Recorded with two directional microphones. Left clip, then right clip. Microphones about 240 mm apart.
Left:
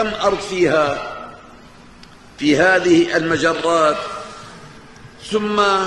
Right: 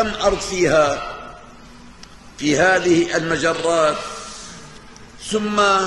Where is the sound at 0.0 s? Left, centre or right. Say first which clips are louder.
Even; centre.